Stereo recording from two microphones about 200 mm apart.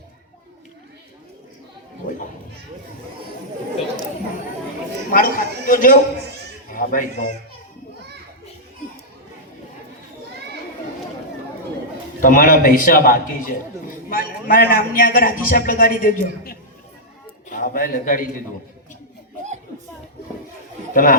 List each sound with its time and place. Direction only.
5.1 s a man's voice: 45° left (ahead or behind)
12.2 s a man's voice: 45° left (ahead or behind)
20.9 s speech: 45° left (ahead or behind)